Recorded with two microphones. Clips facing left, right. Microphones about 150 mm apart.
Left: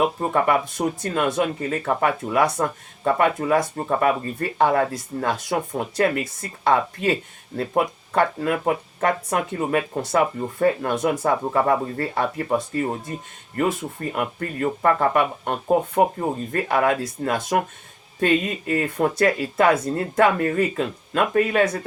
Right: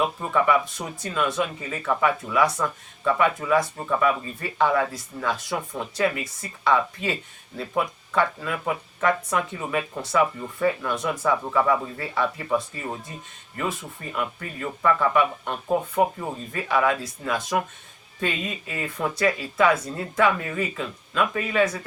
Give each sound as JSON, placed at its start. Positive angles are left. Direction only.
{"t": 0.2, "sound": "speech", "side_deg": 45}